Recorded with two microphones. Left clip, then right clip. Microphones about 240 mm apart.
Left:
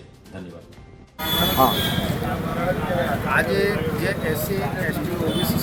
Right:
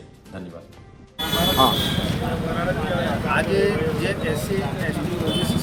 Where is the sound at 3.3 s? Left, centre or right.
Centre.